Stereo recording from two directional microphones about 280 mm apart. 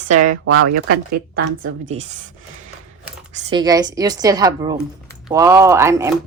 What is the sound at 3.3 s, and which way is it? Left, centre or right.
Speech, centre.